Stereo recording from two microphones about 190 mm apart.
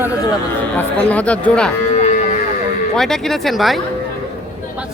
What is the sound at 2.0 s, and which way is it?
Moo, 40° left (ahead or behind).